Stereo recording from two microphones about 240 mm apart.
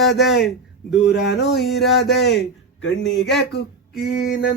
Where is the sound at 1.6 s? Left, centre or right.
Centre.